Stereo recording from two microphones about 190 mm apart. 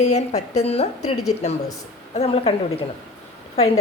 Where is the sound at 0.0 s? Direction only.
35° left (ahead or behind).